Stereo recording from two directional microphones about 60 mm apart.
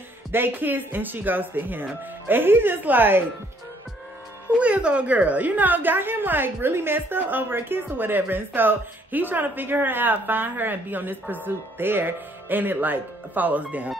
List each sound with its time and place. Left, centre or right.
0.3 s a woman's voice: right
4.6 s a woman's voice: centre